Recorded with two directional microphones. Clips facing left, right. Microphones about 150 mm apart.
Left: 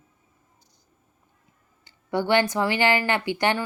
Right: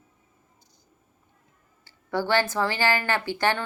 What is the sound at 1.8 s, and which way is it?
A woman's voice, 15° left (ahead or behind).